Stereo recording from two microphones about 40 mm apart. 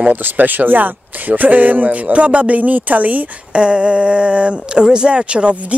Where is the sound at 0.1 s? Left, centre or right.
Right.